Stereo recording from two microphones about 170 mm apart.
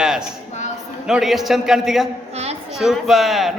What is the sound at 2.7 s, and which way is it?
Speech, centre (ahead or behind).